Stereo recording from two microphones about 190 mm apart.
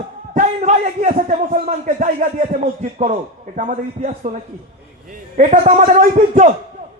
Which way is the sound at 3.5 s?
40° right (ahead or behind).